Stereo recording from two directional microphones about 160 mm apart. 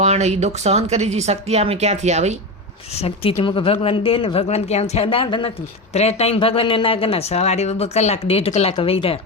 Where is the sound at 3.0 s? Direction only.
35° left (ahead or behind).